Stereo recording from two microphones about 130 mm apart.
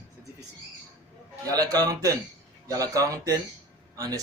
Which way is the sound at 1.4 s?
30° right (ahead or behind).